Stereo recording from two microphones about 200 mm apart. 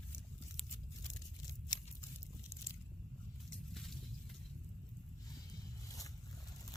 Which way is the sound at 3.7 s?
Centre (ahead or behind).